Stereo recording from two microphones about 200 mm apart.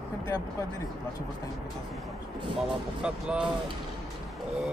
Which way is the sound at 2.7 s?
5° right (ahead or behind).